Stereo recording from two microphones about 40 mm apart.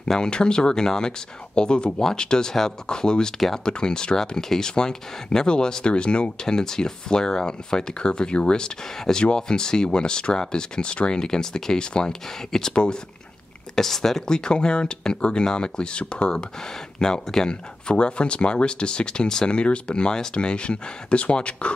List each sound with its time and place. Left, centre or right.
0.1 s speech: left
3.3 s speech: centre
3.6 s speech: centre
6.4 s speech: centre
13.7 s speech: centre; by 16.3 s left
16.3 s speech: centre